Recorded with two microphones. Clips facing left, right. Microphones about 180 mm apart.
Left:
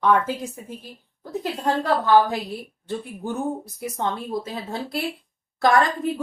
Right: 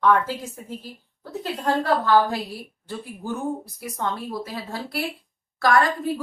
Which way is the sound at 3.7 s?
20° left (ahead or behind).